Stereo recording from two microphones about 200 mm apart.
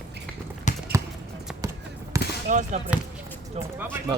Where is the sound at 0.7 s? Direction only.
35° left (ahead or behind).